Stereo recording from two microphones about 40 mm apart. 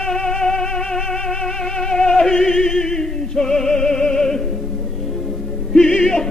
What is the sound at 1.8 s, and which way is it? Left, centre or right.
Music, centre.